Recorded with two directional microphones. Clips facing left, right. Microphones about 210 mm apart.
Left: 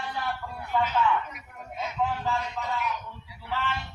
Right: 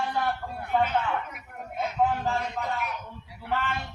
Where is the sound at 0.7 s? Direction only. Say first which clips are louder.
Even; 55° right (ahead or behind).